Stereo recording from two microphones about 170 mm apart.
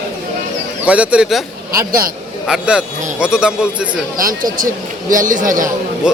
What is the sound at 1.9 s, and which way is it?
Speech, 55° right (ahead or behind).